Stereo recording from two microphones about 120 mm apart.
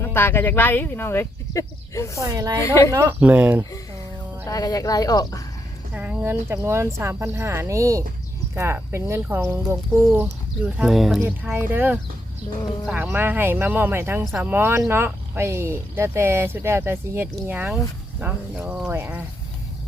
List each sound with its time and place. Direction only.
0.0 s speech: 20° left (ahead or behind)
2.2 s speech: 30° right (ahead or behind)
2.6 s speech: 25° left (ahead or behind)
2.9 s speech: 25° right (ahead or behind)
3.2 s speech: 15° right (ahead or behind)
4.4 s speech: 30° left (ahead or behind)
5.9 s speech: 15° right (ahead or behind)
10.8 s speech: 5° right (ahead or behind)
11.5 s speech: 15° right (ahead or behind)